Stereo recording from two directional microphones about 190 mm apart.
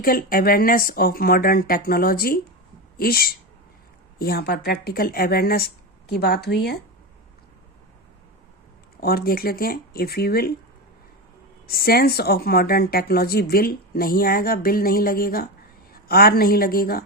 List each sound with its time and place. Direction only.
0.0 s speech: 50° left (ahead or behind)
9.0 s speech: 55° left (ahead or behind)
11.6 s a woman's voice: 50° left (ahead or behind)